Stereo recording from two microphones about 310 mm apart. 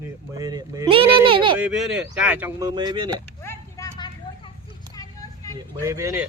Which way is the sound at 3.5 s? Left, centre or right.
Centre.